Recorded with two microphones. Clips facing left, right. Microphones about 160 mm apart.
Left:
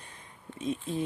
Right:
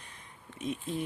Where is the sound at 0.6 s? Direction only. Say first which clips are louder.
Left 2 dB; 30° left (ahead or behind).